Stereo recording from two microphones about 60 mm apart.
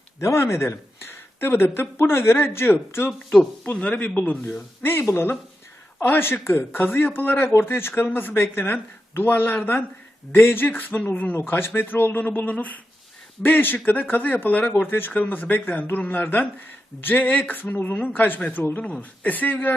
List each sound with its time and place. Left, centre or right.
0.2 s speech: left
3.8 s speech: left
18.8 s speech: left